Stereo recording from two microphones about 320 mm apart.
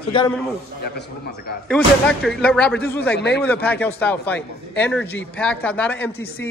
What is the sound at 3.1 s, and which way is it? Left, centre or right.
Speech, left.